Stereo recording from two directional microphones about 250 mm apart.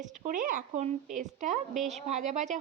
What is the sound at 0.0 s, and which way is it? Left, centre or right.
Speech, right.